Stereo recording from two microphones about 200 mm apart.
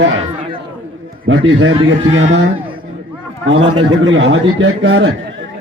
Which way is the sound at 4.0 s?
75° right (ahead or behind).